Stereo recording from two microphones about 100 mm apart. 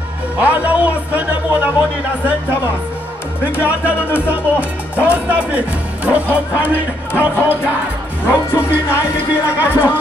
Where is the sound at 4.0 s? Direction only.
20° left (ahead or behind).